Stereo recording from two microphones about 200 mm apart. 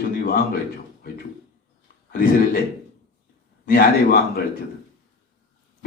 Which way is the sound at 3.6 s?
50° left (ahead or behind).